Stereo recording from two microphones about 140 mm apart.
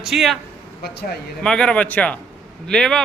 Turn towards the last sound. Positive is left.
turn(degrees=5)  # may be behind; listen again after turning